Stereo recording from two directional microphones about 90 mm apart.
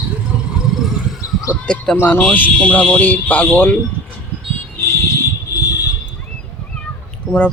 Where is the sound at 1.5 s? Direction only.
10° left (ahead or behind).